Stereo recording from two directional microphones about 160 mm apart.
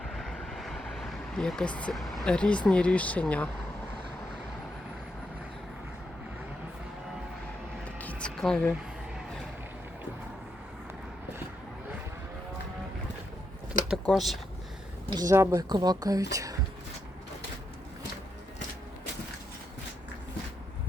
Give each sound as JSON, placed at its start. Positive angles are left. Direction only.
{"t": 0.0, "sound": "vehicle", "side_deg": 0}
{"t": 7.9, "sound": "music", "side_deg": 10}
{"t": 13.9, "sound": "speech", "side_deg": 0}
{"t": 15.1, "sound": "speech", "side_deg": -20}